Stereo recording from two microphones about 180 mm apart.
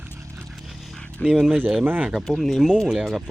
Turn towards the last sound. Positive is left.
turn(degrees=0)  # may be behind; listen again after turning